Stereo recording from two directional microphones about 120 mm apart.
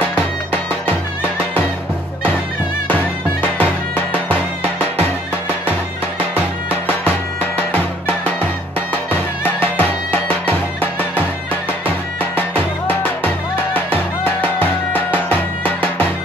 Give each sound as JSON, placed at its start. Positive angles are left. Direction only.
{"t": 3.5, "sound": "music", "side_deg": 15}
{"t": 9.4, "sound": "music", "side_deg": 15}
{"t": 12.4, "sound": "music", "side_deg": 15}